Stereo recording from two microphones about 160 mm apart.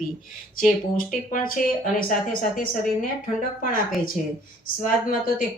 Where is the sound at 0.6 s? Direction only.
60° left (ahead or behind).